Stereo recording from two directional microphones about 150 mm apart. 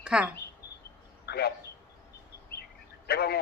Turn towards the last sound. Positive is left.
turn(degrees=90)